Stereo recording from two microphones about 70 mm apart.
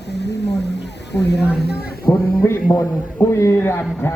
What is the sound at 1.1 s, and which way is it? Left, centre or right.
Speech, left.